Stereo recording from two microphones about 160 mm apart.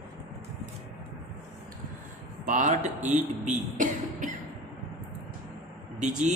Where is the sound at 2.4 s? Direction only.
50° right (ahead or behind).